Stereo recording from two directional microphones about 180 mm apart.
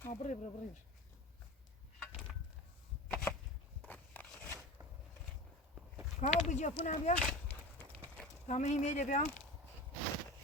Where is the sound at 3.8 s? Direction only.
10° left (ahead or behind).